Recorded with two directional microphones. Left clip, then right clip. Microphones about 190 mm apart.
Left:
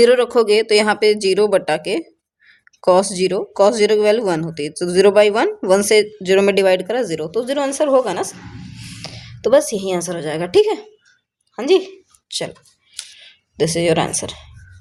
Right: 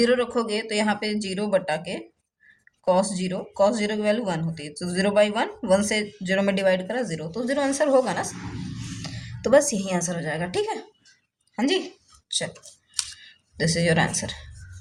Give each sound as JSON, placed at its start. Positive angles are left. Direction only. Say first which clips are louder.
{"t": 0.0, "sound": "a woman's voice", "louder": "left 10 dB", "side_deg": 50}
{"t": 13.6, "sound": "speech", "louder": "left 6 dB", "side_deg": 40}